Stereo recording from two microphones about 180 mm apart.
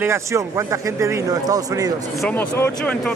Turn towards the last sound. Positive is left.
turn(degrees=5)  # may be behind; listen again after turning